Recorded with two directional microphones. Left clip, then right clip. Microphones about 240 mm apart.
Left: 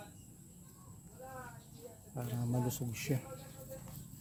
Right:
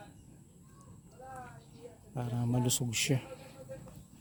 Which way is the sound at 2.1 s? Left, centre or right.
Right.